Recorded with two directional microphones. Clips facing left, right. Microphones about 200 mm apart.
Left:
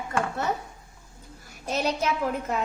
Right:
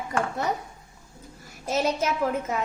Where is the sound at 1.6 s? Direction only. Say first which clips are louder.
Right 2 dB; 5° right (ahead or behind).